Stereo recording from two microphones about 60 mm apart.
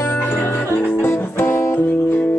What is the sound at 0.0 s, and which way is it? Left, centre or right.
Music, left.